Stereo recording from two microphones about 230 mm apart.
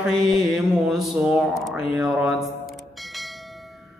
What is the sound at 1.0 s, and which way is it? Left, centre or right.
Mantra, centre.